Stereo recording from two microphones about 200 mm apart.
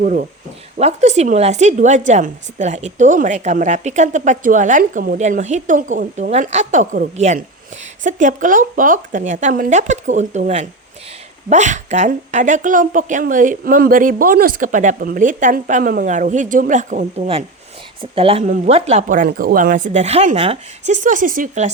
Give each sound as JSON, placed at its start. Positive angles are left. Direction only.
{"t": 0.0, "sound": "a woman's voice", "side_deg": -40}
{"t": 18.0, "sound": "a woman's voice", "side_deg": -30}